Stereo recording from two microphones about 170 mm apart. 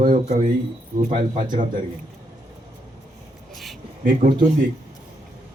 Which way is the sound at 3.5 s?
Centre (ahead or behind).